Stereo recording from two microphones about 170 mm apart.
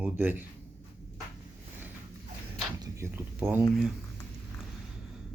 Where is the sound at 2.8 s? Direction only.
15° right (ahead or behind).